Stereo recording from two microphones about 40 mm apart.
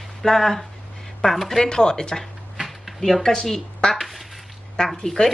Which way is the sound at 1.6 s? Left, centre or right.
Centre.